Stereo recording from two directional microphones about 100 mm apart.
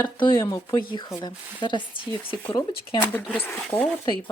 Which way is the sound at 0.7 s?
50° left (ahead or behind).